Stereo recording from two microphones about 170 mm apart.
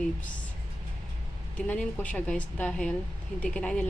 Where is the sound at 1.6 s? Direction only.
5° left (ahead or behind).